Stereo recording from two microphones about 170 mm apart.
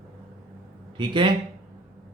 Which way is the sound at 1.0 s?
30° right (ahead or behind).